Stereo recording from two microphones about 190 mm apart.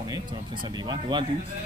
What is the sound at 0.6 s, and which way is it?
Speech, 20° right (ahead or behind).